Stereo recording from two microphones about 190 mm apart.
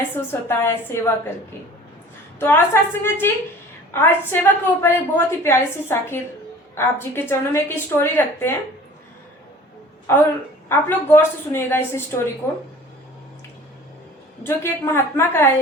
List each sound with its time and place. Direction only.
0.3 s a woman's voice: 15° left (ahead or behind)
2.4 s a woman's voice: 10° left (ahead or behind)
10.7 s a woman's voice: 10° left (ahead or behind)
14.4 s a woman's voice: 15° left (ahead or behind)